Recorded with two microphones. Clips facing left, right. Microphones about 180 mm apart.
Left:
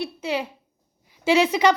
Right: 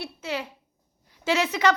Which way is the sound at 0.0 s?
15° left (ahead or behind).